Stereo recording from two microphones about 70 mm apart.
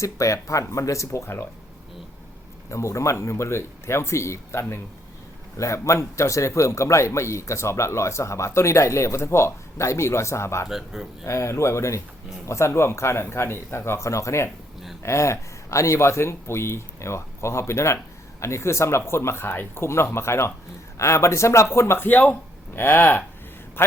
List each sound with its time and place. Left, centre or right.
0.0 s a man's voice: left
2.6 s a man's voice: left
10.7 s speech: centre
11.3 s a man's voice: left